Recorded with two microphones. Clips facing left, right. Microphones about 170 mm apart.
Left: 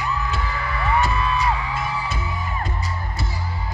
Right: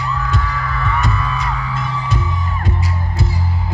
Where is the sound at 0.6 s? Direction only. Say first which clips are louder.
Left 3 dB; 30° left (ahead or behind).